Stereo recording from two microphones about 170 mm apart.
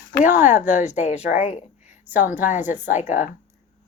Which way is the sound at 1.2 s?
10° right (ahead or behind).